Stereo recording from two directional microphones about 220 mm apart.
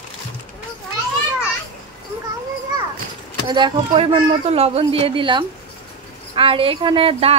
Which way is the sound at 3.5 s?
20° right (ahead or behind).